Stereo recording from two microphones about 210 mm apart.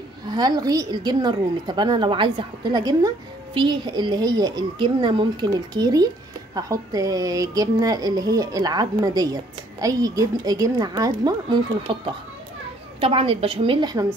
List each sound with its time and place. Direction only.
0.3 s a woman's voice: 20° right (ahead or behind)
13.0 s a woman's voice: 25° right (ahead or behind)